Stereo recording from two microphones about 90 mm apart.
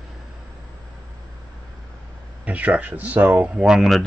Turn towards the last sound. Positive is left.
turn(degrees=0)  # may be behind; listen again after turning